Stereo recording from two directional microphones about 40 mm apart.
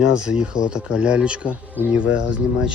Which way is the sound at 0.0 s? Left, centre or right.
Centre.